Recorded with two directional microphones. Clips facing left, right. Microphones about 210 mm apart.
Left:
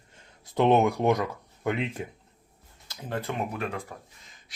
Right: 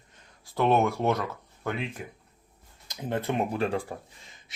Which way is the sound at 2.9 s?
20° right (ahead or behind).